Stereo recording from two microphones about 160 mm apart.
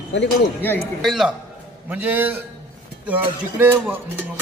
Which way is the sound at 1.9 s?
10° right (ahead or behind).